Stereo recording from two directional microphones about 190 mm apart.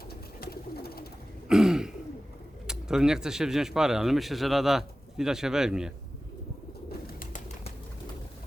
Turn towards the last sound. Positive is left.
turn(degrees=50)  # may be behind; listen again after turning